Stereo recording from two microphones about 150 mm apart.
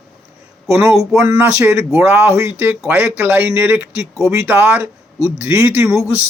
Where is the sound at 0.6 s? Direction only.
20° right (ahead or behind).